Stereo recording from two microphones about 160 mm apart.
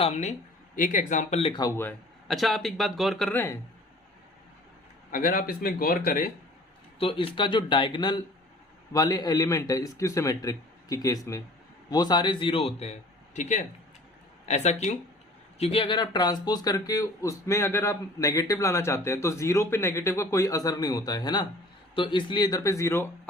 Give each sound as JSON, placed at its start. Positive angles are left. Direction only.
{"t": 0.0, "sound": "speech", "side_deg": 45}
{"t": 1.4, "sound": "a man's voice", "side_deg": 35}
{"t": 1.6, "sound": "speech", "side_deg": 15}
{"t": 2.2, "sound": "speech", "side_deg": 0}
{"t": 5.1, "sound": "a man's voice", "side_deg": 60}
{"t": 7.0, "sound": "a man's voice", "side_deg": 35}